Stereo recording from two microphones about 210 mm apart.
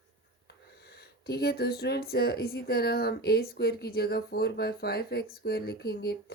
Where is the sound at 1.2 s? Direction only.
50° left (ahead or behind).